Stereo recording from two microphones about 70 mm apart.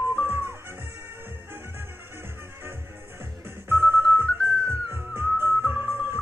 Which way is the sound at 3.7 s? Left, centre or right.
Right.